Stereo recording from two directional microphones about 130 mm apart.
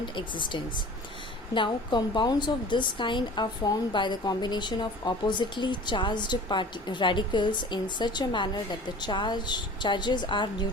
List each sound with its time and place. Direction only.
0.0 s speech: 40° left (ahead or behind)